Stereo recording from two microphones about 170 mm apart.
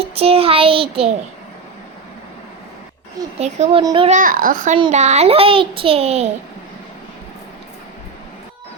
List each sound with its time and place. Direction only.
0.0 s a child's voice: 35° right (ahead or behind)
3.3 s a child's voice: 40° right (ahead or behind)
4.1 s a child's voice: 55° right (ahead or behind)
4.8 s a child's voice: 40° right (ahead or behind)